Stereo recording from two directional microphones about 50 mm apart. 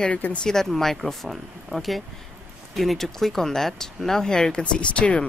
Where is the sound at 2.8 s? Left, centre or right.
Centre.